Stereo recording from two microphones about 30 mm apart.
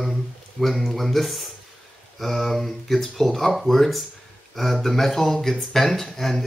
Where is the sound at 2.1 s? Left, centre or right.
Centre.